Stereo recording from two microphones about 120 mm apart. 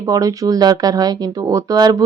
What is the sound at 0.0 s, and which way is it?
A woman's voice, 30° right (ahead or behind).